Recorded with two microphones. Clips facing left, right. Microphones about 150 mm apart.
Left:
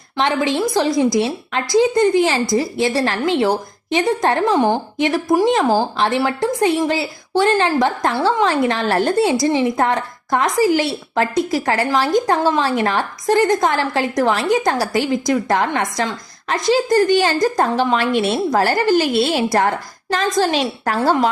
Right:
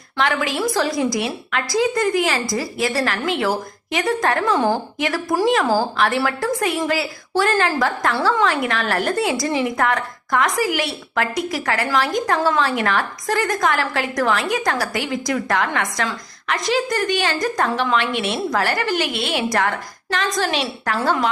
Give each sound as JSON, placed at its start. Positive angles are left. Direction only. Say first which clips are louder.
{"t": 0.2, "sound": "a woman's voice", "louder": "left 3 dB", "side_deg": 25}